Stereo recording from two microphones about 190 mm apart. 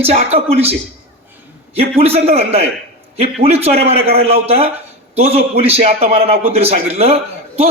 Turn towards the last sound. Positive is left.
turn(degrees=-30)  # may be behind; listen again after turning